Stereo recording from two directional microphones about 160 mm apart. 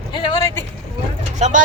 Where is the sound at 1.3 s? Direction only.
50° right (ahead or behind).